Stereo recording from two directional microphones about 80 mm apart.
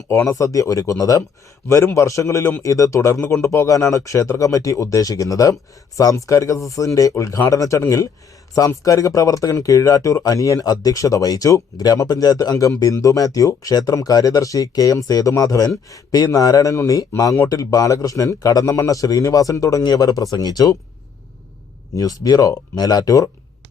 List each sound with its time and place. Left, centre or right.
0.1 s a man's voice: left
19.8 s speech: left
21.9 s speech: left